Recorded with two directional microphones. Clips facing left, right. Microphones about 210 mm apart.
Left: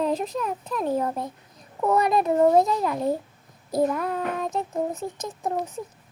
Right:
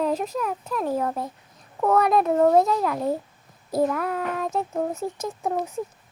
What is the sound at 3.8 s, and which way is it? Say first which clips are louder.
Child singing: even; centre (ahead or behind).